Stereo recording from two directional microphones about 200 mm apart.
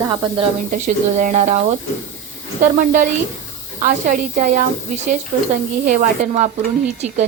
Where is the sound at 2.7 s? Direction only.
45° right (ahead or behind).